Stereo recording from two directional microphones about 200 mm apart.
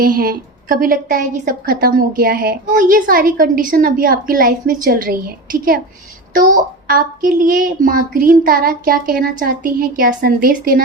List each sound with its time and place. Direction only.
0.0 s a woman's voice: 45° right (ahead or behind)